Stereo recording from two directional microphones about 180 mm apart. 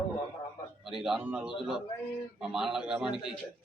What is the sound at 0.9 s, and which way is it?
Speech, centre (ahead or behind).